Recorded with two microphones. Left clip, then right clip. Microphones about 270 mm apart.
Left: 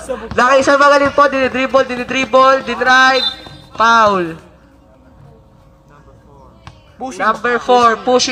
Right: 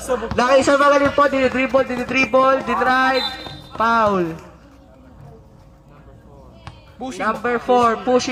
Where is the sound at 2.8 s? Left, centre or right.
Left.